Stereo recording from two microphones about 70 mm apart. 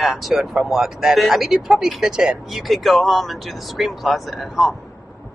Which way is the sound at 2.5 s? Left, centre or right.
Centre.